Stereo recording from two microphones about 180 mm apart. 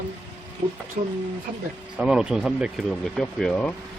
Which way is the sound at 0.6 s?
30° right (ahead or behind).